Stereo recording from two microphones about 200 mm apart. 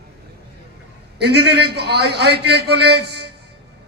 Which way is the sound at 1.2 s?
55° right (ahead or behind).